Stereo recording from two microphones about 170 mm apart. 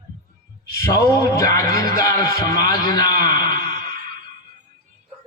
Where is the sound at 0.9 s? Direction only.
20° left (ahead or behind).